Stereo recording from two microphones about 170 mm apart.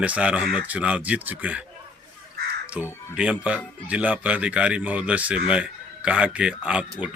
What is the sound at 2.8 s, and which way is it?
Speech, 5° right (ahead or behind).